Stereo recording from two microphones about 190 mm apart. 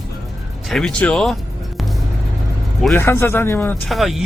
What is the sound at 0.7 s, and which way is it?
Speech, 5° left (ahead or behind).